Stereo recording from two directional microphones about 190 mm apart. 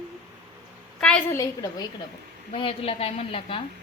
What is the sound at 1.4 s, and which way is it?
A woman's voice, 20° left (ahead or behind).